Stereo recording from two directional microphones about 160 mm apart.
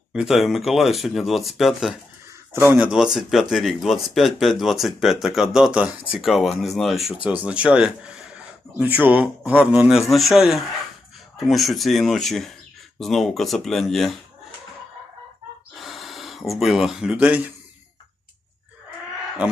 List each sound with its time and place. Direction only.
0.1 s speech: 5° right (ahead or behind)
15.8 s speech: centre (ahead or behind)